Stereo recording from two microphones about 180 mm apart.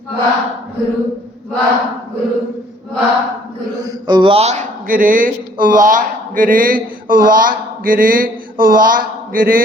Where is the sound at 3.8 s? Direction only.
20° right (ahead or behind).